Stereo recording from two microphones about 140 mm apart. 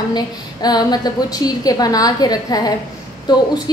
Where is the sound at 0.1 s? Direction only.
30° left (ahead or behind).